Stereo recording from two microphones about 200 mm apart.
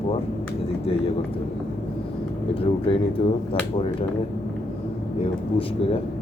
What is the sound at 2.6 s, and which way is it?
Speech, 25° left (ahead or behind).